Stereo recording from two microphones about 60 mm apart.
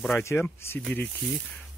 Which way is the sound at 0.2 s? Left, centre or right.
Left.